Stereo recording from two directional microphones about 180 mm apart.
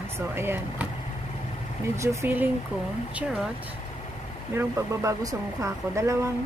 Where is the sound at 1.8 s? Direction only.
15° right (ahead or behind).